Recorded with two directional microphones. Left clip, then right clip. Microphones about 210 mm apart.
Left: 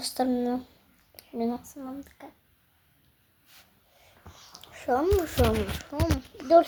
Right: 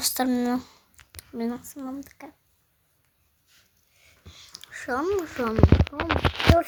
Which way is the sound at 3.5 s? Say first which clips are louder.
Left 4 dB; 50° left (ahead or behind).